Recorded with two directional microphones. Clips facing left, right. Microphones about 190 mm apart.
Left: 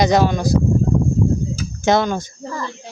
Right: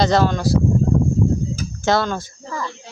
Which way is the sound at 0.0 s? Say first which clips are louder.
Left 1 dB; 15° left (ahead or behind).